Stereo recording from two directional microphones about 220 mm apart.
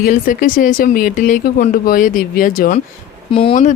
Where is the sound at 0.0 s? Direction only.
40° left (ahead or behind).